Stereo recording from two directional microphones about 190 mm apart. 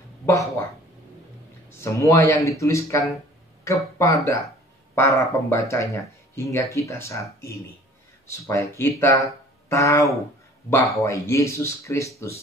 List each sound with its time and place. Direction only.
0.3 s speech: 15° left (ahead or behind)
1.7 s speech: 15° left (ahead or behind)